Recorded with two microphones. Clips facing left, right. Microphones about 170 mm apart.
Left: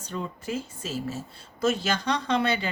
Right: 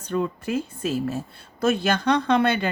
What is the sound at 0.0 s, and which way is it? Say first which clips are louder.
Speech: right 8 dB; 60° right (ahead or behind).